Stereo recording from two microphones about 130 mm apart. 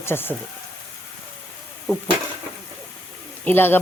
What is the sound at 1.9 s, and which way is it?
Sizzle, 20° left (ahead or behind).